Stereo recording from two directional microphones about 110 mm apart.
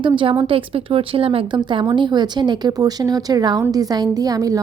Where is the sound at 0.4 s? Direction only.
55° right (ahead or behind).